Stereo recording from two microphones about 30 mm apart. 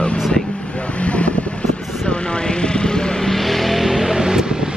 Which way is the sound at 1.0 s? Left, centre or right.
Left.